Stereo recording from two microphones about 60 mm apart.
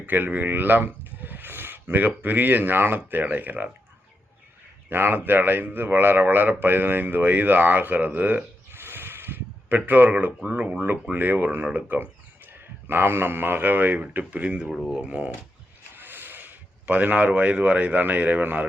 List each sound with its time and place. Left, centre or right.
0.0 s speech: right
4.9 s speech: right
8.7 s a sound: right
11.1 s speech: right
16.0 s speech: right